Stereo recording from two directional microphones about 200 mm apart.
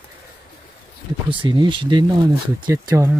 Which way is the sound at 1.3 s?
25° right (ahead or behind).